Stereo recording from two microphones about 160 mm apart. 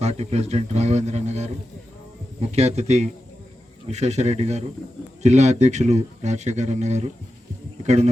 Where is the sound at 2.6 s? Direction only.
40° right (ahead or behind).